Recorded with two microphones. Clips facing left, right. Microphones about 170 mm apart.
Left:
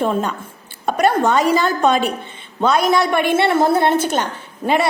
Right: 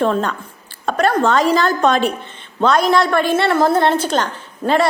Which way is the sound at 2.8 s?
15° left (ahead or behind).